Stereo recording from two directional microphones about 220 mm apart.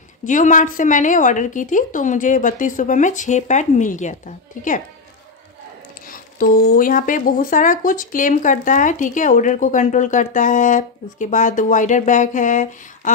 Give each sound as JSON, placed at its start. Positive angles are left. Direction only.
{"t": 0.2, "sound": "speech", "side_deg": 35}
{"t": 6.0, "sound": "speech", "side_deg": 40}